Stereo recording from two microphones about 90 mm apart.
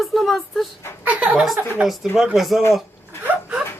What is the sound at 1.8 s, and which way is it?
Speech, 5° right (ahead or behind).